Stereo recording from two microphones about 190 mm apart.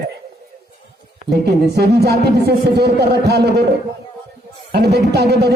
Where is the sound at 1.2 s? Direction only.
60° right (ahead or behind).